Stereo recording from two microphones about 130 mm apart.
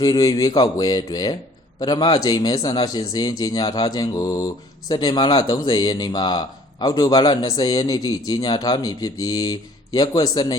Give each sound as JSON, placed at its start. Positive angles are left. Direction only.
{"t": 0.0, "sound": "speech", "side_deg": 30}